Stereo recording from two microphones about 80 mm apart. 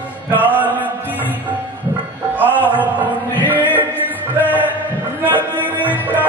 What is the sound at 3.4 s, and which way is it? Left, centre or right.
Chant, left.